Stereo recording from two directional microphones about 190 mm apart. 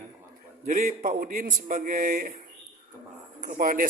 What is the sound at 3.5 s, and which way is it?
Speech, 45° right (ahead or behind).